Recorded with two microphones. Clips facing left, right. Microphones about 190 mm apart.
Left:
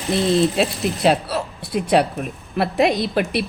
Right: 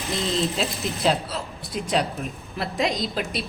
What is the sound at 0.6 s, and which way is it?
A woman's voice, 70° left (ahead or behind).